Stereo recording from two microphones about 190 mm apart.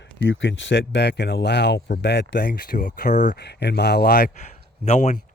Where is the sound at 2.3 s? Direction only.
50° left (ahead or behind).